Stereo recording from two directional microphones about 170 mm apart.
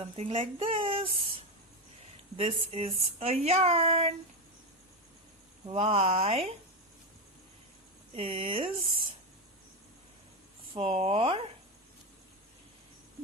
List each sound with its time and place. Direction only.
0.0 s speech: 35° right (ahead or behind)
5.7 s speech: 40° right (ahead or behind)
8.1 s speech: 35° right (ahead or behind)
10.8 s speech: 35° right (ahead or behind)